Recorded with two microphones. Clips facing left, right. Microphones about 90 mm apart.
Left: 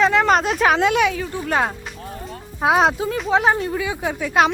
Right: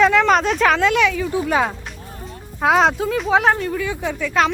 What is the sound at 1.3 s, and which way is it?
Speech, 5° right (ahead or behind).